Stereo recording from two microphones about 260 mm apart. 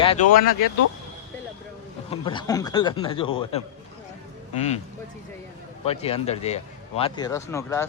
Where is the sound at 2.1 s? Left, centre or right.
Centre.